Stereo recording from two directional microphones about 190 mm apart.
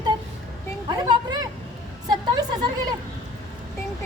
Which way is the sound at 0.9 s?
20° right (ahead or behind).